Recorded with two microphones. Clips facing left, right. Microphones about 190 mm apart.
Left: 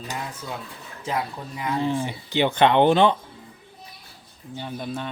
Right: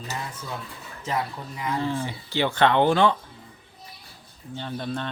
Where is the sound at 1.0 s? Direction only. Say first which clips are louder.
Left 1 dB; 15° left (ahead or behind).